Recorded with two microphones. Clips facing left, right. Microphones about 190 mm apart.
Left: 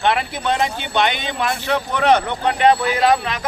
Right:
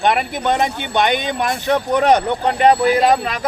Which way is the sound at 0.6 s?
45° right (ahead or behind).